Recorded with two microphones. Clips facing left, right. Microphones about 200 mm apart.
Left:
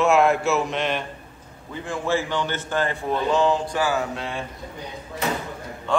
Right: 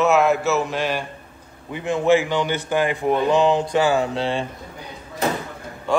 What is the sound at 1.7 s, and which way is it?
A man's voice, 20° right (ahead or behind).